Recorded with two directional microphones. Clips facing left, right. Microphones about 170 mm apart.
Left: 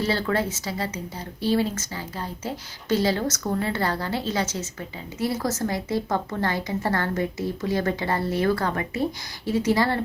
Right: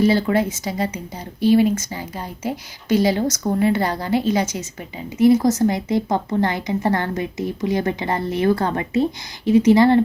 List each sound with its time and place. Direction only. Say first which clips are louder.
0.0 s speech: right 7 dB; 15° right (ahead or behind)